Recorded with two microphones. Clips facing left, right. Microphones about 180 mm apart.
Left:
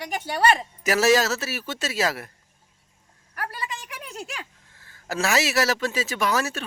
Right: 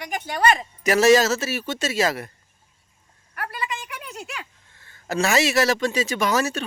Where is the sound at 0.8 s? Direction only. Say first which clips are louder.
Right 5 dB; centre (ahead or behind).